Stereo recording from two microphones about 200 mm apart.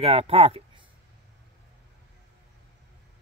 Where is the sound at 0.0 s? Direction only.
30° right (ahead or behind).